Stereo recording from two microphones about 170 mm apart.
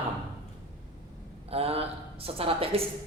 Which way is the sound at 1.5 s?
35° right (ahead or behind).